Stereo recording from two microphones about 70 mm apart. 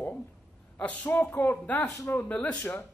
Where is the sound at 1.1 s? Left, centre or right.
Left; by 2.6 s centre.